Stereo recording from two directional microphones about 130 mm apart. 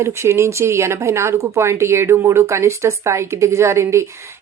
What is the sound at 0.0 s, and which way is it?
Speech, 20° right (ahead or behind).